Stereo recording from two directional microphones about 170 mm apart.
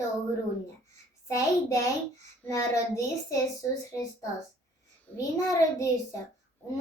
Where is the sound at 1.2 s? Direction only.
15° left (ahead or behind).